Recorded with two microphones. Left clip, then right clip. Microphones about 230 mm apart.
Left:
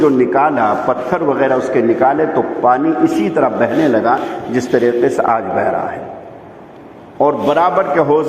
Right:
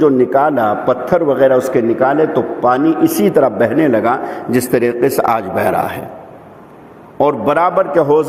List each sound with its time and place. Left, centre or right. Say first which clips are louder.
0.0 s a man's voice: right 1 dB; right
7.2 s a man's voice: even; right